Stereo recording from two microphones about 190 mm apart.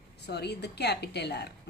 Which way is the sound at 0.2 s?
60° left (ahead or behind).